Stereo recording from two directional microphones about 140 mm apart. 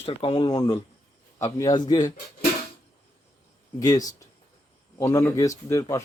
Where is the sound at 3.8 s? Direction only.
25° left (ahead or behind).